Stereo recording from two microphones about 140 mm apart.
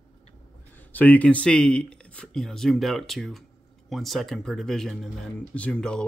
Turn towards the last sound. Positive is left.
turn(degrees=5)  # may be behind; listen again after turning